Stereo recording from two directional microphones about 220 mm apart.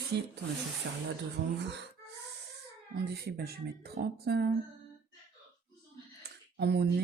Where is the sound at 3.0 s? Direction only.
45° right (ahead or behind).